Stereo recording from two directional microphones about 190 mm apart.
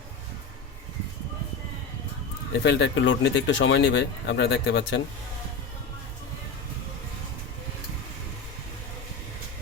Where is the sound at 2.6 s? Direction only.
65° left (ahead or behind).